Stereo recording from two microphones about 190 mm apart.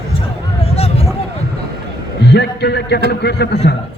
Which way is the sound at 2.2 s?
60° left (ahead or behind).